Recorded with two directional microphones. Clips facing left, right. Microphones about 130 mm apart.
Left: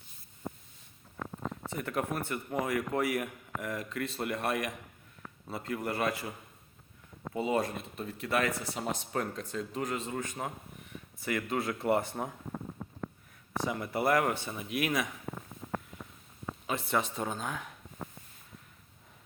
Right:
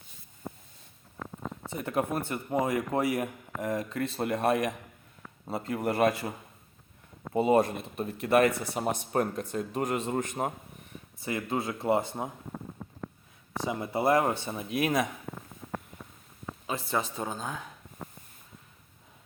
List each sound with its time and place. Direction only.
1.7 s speech: 20° right (ahead or behind)
5.7 s speech: 30° right (ahead or behind)
7.3 s speech: 55° right (ahead or behind)
10.4 s speech: 40° right (ahead or behind)
11.2 s speech: 25° right (ahead or behind)
13.7 s speech: 20° right (ahead or behind)
16.6 s speech: 35° right (ahead or behind)
17.2 s speech: 5° right (ahead or behind)
17.4 s speech: 30° right (ahead or behind)